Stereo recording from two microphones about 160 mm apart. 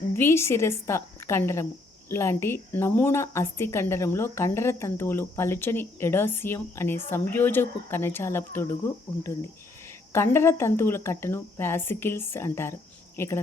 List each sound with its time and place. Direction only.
0.1 s a woman's voice: 15° left (ahead or behind)
10.1 s a woman's voice: 15° left (ahead or behind)